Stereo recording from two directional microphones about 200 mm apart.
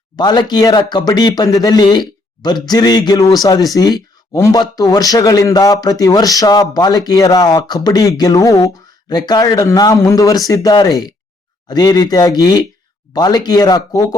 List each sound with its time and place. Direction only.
0.2 s speech: 20° left (ahead or behind)